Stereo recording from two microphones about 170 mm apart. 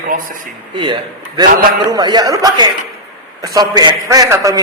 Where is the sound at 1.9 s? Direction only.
25° right (ahead or behind).